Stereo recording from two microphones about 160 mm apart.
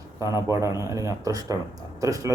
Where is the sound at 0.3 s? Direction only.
25° left (ahead or behind).